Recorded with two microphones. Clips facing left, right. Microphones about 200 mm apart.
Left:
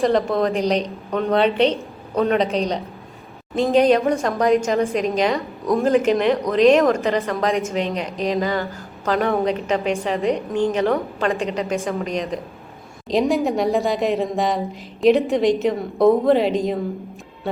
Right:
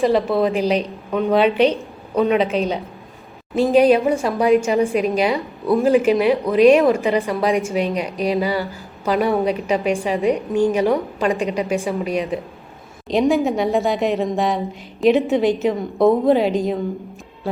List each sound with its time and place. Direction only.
0.0 s a woman's voice: 5° right (ahead or behind)